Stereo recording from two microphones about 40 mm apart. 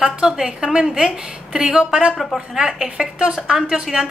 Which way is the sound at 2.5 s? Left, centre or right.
Centre.